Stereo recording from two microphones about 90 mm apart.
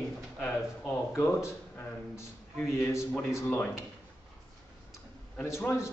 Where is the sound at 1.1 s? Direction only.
30° left (ahead or behind).